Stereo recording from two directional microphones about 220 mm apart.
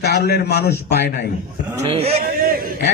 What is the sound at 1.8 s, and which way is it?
Speech, 25° right (ahead or behind).